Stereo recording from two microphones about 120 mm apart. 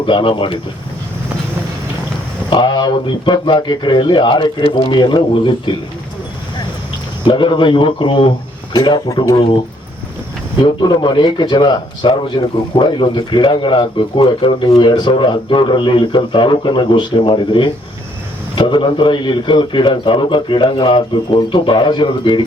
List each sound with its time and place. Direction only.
0.0 s a man's voice: 45° left (ahead or behind)
2.5 s a man's voice: 40° left (ahead or behind)
7.3 s a man's voice: 40° left (ahead or behind)
10.6 s a man's voice: 40° left (ahead or behind)